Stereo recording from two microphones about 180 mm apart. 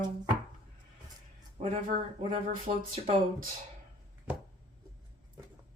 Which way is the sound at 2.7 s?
45° right (ahead or behind).